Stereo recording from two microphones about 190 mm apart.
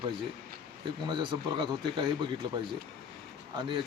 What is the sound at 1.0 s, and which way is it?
Speech, 25° right (ahead or behind).